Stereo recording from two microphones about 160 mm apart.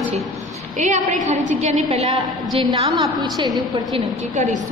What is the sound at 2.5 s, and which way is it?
Speech, 30° right (ahead or behind).